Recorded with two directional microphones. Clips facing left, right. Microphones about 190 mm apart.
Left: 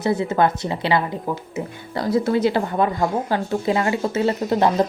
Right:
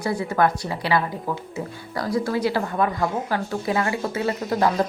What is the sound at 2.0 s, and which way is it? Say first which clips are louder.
Speech: left 4 dB; 25° left (ahead or behind).